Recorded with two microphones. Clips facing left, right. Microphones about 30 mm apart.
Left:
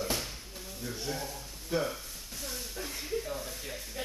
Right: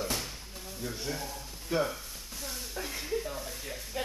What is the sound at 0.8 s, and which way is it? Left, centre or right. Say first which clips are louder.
Speech: even; centre.